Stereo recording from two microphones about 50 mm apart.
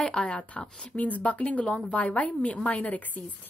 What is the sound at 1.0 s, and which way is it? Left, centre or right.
A woman's voice, left.